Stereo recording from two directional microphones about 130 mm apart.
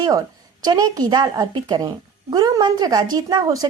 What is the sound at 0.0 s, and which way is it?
A woman's voice, 30° right (ahead or behind).